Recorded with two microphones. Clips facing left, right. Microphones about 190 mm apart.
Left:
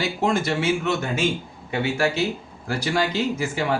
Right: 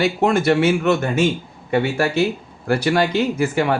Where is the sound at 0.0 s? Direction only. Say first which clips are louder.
Right 6 dB; 60° right (ahead or behind).